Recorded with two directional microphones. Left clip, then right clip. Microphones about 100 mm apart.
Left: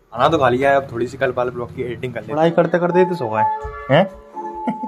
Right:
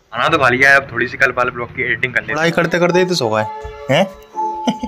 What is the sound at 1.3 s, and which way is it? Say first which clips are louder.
Speech: right 3 dB; 25° right (ahead or behind).